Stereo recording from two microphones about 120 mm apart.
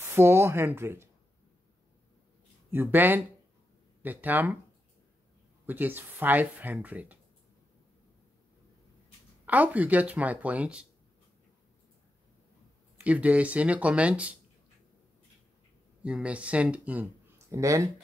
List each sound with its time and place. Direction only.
0.0 s speech: 20° right (ahead or behind)
2.7 s speech: 15° right (ahead or behind)
5.7 s speech: 15° right (ahead or behind)
9.5 s speech: 15° right (ahead or behind)
13.0 s speech: 10° right (ahead or behind)
16.0 s speech: 10° right (ahead or behind)
17.6 s speech: 25° right (ahead or behind)